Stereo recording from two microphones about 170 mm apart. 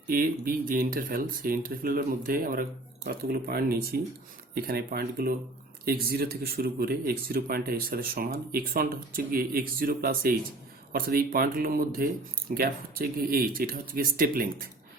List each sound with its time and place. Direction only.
0.1 s speech: 55° right (ahead or behind)